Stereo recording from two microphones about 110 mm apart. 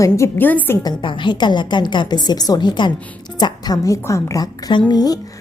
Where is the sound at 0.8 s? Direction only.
45° left (ahead or behind); by 4.5 s 30° left (ahead or behind).